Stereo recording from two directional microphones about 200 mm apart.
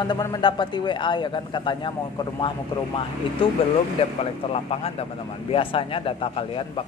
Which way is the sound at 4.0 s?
30° left (ahead or behind).